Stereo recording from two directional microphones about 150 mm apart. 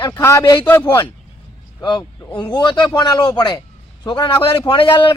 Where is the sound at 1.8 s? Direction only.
30° left (ahead or behind).